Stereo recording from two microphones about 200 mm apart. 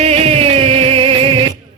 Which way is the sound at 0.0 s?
30° right (ahead or behind).